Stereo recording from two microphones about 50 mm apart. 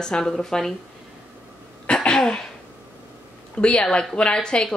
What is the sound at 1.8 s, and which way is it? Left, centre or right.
Throat clearing, centre.